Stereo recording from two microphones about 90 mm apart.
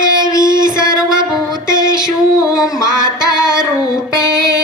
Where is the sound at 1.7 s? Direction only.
55° right (ahead or behind).